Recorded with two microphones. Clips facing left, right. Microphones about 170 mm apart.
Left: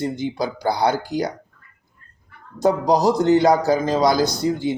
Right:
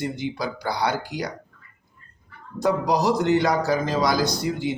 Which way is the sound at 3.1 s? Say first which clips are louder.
Left 5 dB; 30° left (ahead or behind).